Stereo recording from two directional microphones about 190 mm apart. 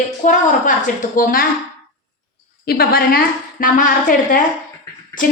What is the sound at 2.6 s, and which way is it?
A woman's voice, 55° left (ahead or behind).